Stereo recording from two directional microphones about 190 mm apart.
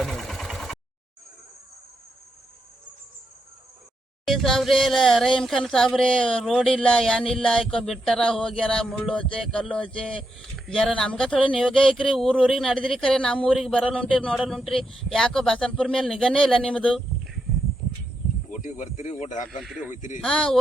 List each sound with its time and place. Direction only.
0.0 s engine: centre (ahead or behind)
4.3 s speech: centre (ahead or behind)
18.5 s speech: 40° left (ahead or behind)
20.2 s speech: 5° left (ahead or behind)